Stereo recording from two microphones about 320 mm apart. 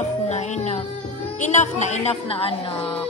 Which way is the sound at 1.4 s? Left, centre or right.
Left.